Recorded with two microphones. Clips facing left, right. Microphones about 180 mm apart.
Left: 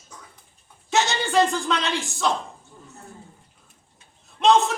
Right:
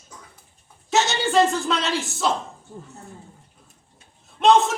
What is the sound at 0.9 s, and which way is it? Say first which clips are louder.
Speech: right 1 dB; centre (ahead or behind).